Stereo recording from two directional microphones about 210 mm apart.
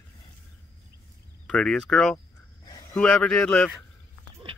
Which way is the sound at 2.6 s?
20° left (ahead or behind).